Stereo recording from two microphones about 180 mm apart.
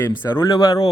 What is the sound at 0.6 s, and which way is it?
Speech, 30° left (ahead or behind).